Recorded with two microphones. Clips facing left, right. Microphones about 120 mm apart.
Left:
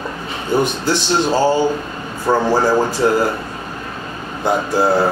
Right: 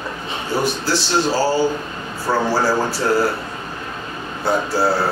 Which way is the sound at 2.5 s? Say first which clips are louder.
Left 3 dB; 15° left (ahead or behind).